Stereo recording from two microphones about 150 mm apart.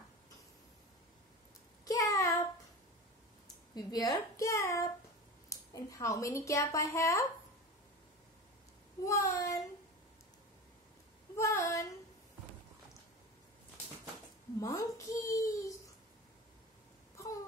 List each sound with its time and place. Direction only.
1.9 s child singing: 20° left (ahead or behind)
3.7 s a woman's voice: 25° left (ahead or behind)
9.0 s a woman's voice: 20° left (ahead or behind)
11.3 s female singing: 20° left (ahead or behind)
14.6 s a child's voice: 20° left (ahead or behind)